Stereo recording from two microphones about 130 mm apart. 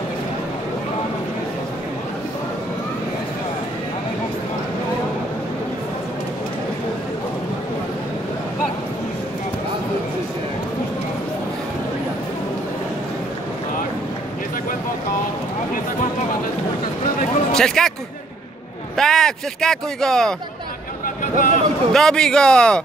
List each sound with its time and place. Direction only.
17.5 s a man's voice: 5° left (ahead or behind)
18.9 s speech: 5° left (ahead or behind)
21.2 s a sound: 90° left
21.9 s speech: 5° left (ahead or behind)